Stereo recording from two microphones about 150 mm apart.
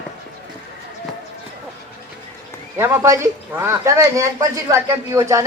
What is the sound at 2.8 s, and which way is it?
Speech, 20° right (ahead or behind).